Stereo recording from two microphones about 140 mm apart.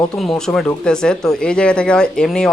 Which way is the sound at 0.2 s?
5° left (ahead or behind).